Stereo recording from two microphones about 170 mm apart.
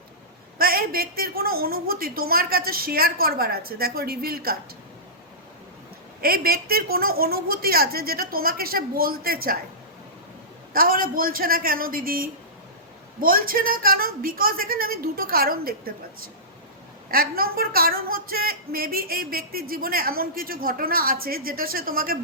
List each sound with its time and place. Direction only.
0.6 s a woman's voice: 60° right (ahead or behind)
6.2 s a woman's voice: 60° right (ahead or behind)
10.8 s a woman's voice: 60° right (ahead or behind)